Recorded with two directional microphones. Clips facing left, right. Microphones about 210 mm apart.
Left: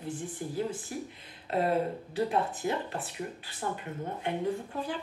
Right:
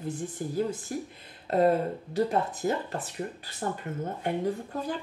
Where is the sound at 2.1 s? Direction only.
40° right (ahead or behind).